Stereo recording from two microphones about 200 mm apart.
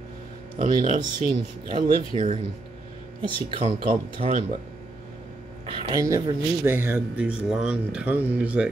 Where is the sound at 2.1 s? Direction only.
30° right (ahead or behind).